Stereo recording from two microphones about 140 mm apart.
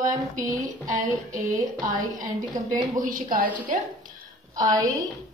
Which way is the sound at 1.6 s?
25° right (ahead or behind).